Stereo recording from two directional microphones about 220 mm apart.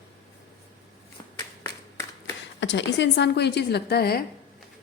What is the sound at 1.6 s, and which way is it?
Clapping, 15° left (ahead or behind).